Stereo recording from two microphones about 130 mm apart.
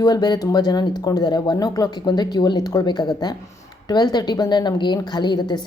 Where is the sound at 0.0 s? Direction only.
30° left (ahead or behind).